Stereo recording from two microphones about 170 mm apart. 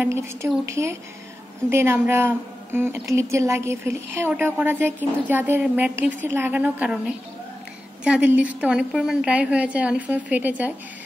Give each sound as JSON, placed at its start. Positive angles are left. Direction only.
{"t": 0.0, "sound": "a woman's voice", "side_deg": -15}